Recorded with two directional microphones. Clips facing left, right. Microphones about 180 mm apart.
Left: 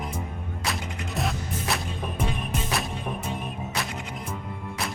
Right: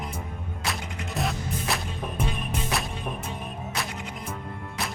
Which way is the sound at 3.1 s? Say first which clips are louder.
Left 1 dB; 15° left (ahead or behind).